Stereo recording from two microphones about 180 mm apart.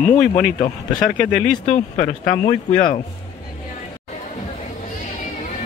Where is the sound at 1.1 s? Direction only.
5° left (ahead or behind).